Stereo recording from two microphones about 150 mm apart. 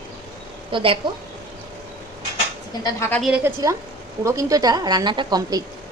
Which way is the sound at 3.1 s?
Centre (ahead or behind).